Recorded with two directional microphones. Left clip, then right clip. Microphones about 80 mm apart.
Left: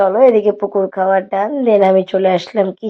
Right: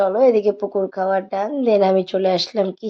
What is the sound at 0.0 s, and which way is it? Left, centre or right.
A woman's voice, left.